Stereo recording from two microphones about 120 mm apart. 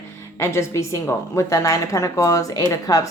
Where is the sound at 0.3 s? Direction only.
25° left (ahead or behind).